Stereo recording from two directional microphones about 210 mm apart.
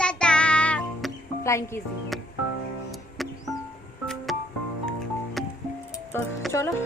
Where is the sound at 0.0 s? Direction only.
5° left (ahead or behind).